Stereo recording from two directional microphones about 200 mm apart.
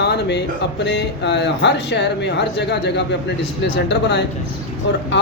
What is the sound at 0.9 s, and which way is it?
Speech, 60° left (ahead or behind).